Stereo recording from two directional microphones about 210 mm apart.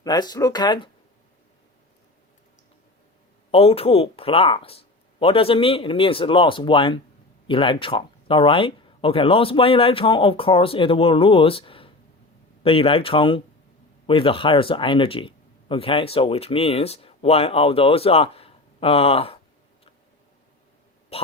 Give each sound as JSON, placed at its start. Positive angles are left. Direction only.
{"t": 0.0, "sound": "speech", "side_deg": 20}
{"t": 3.5, "sound": "speech", "side_deg": 25}